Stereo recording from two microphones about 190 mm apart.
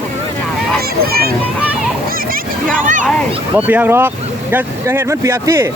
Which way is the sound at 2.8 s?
45° right (ahead or behind).